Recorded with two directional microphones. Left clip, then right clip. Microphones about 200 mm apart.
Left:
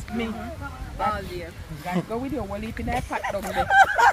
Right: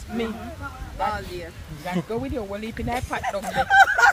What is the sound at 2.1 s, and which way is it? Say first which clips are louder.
Speech: right 1 dB; 55° right (ahead or behind).